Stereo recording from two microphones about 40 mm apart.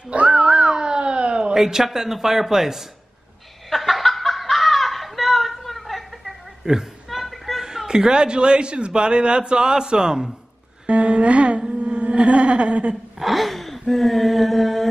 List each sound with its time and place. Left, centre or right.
0.3 s cat: centre
1.5 s speech: centre
3.7 s snicker: centre
6.6 s a woman's voice: centre
7.1 s a sound: centre
7.6 s a man's voice: centre
10.9 s music: right
13.2 s a sound: centre